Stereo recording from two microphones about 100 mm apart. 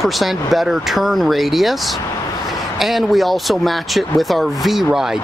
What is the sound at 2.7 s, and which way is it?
Speech, centre (ahead or behind).